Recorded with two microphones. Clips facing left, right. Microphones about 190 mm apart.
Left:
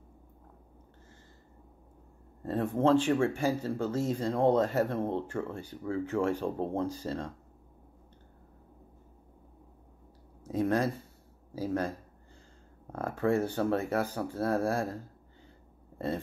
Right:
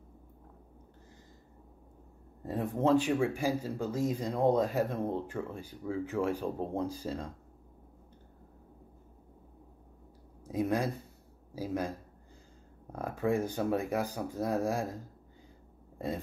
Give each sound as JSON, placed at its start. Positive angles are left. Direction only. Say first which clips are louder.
{"t": 2.4, "sound": "speech", "louder": "left 3 dB", "side_deg": -15}
{"t": 10.5, "sound": "speech", "louder": "left 2 dB", "side_deg": -15}
{"t": 12.9, "sound": "speech", "louder": "left 2 dB", "side_deg": -10}